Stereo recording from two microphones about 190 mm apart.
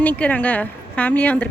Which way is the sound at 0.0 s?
10° left (ahead or behind).